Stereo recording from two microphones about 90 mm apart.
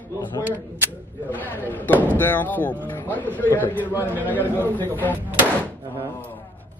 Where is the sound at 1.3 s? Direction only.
20° left (ahead or behind).